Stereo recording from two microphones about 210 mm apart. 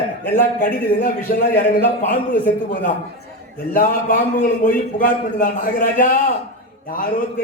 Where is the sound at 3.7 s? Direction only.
40° left (ahead or behind).